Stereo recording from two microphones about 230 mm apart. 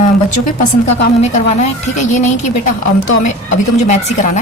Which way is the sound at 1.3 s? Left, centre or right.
Left.